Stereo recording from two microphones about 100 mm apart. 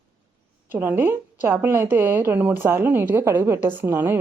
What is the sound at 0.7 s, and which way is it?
A woman's voice, 20° right (ahead or behind).